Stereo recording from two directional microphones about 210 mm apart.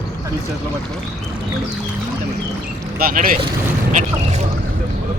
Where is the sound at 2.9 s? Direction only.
45° right (ahead or behind).